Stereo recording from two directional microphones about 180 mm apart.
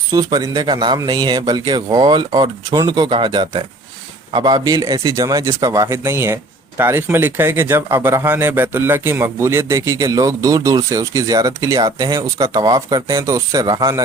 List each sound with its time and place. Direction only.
0.1 s a man's voice: 20° right (ahead or behind)